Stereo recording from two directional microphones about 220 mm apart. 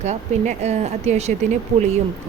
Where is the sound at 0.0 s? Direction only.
30° right (ahead or behind).